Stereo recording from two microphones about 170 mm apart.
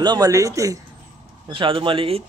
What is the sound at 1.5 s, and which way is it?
Speech, 30° right (ahead or behind).